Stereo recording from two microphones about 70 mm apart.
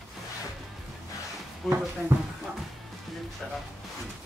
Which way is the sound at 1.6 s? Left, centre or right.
Centre.